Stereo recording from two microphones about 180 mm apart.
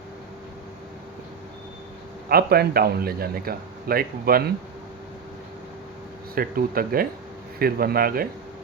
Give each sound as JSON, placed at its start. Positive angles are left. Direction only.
{"t": 2.3, "sound": "a man's voice", "side_deg": -60}
{"t": 6.3, "sound": "a man's voice", "side_deg": -55}